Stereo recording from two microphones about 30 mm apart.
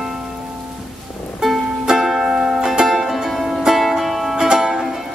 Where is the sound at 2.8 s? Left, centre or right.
Centre.